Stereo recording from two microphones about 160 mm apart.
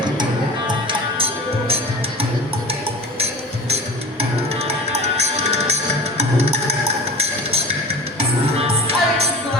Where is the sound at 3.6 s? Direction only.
40° right (ahead or behind).